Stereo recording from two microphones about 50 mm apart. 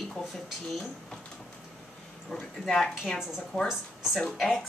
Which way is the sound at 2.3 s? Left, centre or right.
Centre.